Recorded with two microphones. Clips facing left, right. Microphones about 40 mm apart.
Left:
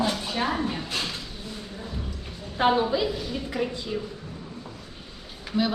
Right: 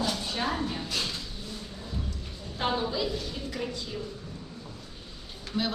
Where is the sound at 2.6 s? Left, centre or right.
Left.